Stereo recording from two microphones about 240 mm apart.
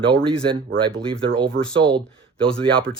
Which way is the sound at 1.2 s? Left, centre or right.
Right.